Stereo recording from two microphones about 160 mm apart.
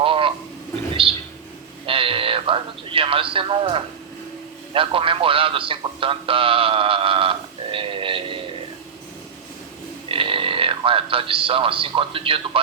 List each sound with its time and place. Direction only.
0.0 s a sound: 35° right (ahead or behind)
1.9 s a man's voice: 35° right (ahead or behind)
10.1 s a man's voice: 35° right (ahead or behind)